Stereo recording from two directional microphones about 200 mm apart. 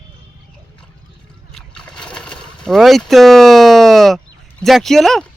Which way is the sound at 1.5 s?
5° left (ahead or behind).